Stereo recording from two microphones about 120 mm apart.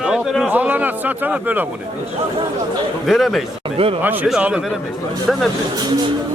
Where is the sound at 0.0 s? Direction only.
Centre (ahead or behind).